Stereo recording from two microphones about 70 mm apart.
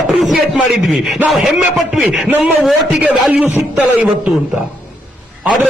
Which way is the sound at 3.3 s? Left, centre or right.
Right.